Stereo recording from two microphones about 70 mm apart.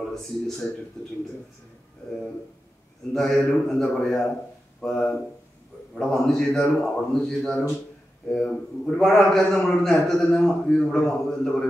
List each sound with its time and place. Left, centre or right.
0.1 s a man's voice: centre
3.1 s a man's voice: centre
8.8 s a man's voice: centre